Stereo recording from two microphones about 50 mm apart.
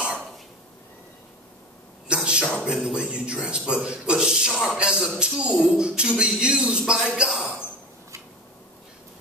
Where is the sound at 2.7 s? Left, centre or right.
Centre.